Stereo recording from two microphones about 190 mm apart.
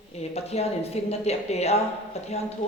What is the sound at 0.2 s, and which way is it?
A woman's voice, 35° left (ahead or behind).